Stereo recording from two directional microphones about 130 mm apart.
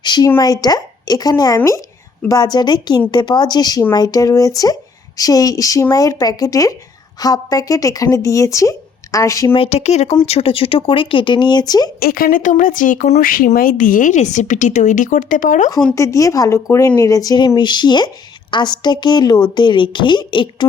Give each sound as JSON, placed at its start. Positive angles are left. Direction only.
{"t": 0.0, "sound": "speech", "side_deg": 35}
{"t": 9.5, "sound": "speech", "side_deg": 50}
{"t": 12.1, "sound": "speech", "side_deg": 90}
{"t": 13.1, "sound": "a woman's voice", "side_deg": 80}
{"t": 16.0, "sound": "speech", "side_deg": 25}